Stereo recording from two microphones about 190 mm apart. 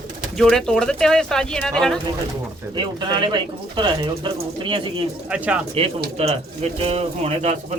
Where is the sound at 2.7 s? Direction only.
25° right (ahead or behind).